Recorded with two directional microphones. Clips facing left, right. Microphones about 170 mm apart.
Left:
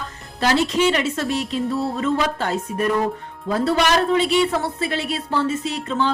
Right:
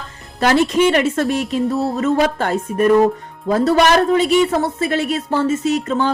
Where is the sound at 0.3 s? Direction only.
55° right (ahead or behind).